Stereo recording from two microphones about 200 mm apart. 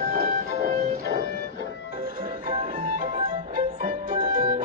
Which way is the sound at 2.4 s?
40° right (ahead or behind).